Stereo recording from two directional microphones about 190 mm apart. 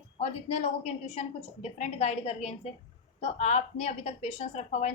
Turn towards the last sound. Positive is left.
turn(degrees=35)  # may be behind; listen again after turning